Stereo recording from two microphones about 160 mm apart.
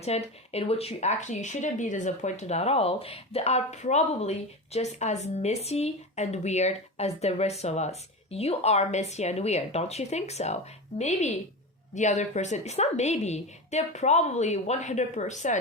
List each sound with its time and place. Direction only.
0.0 s speech: 40° left (ahead or behind)